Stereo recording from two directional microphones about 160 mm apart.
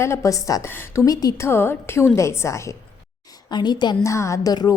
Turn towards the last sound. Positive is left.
turn(degrees=25)  # may be behind; listen again after turning